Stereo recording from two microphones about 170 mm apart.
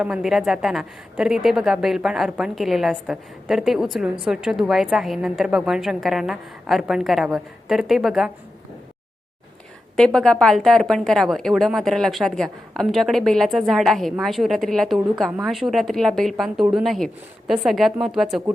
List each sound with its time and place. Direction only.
0.0 s a woman's voice: 5° right (ahead or behind)
9.9 s a woman's voice: 5° left (ahead or behind)